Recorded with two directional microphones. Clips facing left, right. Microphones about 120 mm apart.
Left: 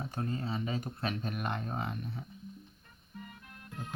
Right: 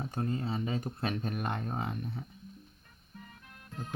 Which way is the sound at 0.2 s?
25° right (ahead or behind).